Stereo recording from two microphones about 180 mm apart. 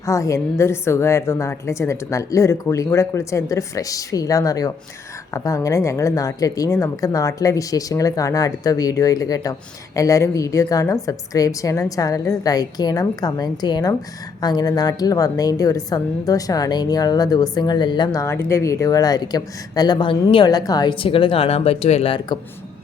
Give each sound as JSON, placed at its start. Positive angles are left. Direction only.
{"t": 0.0, "sound": "a woman's voice", "side_deg": 15}